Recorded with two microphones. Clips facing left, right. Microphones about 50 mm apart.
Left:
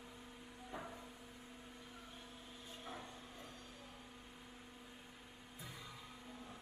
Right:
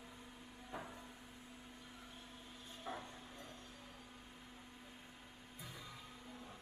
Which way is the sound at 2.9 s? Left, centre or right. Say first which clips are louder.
Right 4 dB; centre.